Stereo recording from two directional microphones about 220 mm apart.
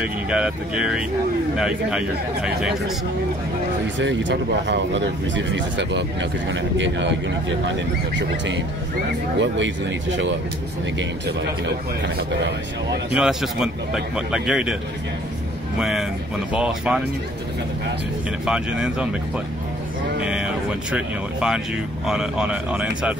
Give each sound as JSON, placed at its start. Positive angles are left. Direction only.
{"t": 0.0, "sound": "a man's voice", "side_deg": -5}
{"t": 3.8, "sound": "speech", "side_deg": -55}
{"t": 9.4, "sound": "speech", "side_deg": -55}
{"t": 13.1, "sound": "a man's voice", "side_deg": -5}
{"t": 15.8, "sound": "a man's voice", "side_deg": 0}
{"t": 18.4, "sound": "a man's voice", "side_deg": -5}
{"t": 20.2, "sound": "a sound", "side_deg": -5}
{"t": 22.0, "sound": "a man's voice", "side_deg": -5}